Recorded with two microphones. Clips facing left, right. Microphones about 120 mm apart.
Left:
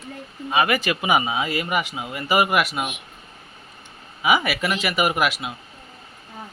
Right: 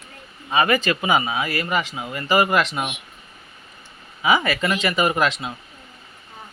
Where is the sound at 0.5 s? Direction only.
10° left (ahead or behind).